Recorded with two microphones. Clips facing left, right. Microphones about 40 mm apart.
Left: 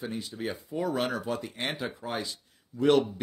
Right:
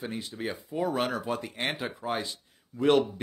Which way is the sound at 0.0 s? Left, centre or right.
Centre.